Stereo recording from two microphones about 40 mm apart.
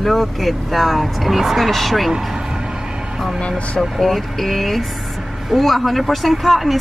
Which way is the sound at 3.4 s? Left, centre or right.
Left.